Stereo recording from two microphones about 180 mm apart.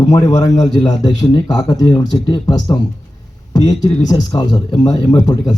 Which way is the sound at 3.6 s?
20° left (ahead or behind).